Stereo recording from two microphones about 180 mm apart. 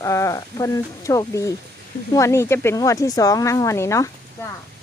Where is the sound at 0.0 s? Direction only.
15° left (ahead or behind).